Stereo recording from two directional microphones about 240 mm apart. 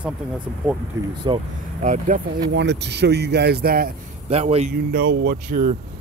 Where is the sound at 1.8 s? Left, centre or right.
Right.